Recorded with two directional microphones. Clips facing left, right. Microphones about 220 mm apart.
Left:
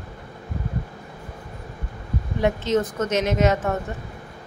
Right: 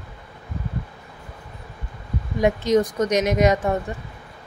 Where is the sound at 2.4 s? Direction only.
15° right (ahead or behind).